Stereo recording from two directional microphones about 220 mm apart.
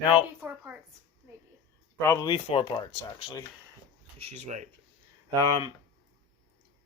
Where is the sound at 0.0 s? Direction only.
20° left (ahead or behind).